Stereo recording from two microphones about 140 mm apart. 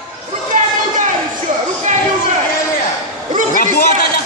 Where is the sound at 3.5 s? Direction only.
85° left.